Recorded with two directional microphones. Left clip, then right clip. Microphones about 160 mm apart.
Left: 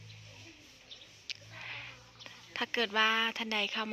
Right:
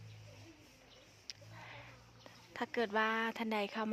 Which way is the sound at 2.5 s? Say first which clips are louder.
Left 4 dB; 15° right (ahead or behind).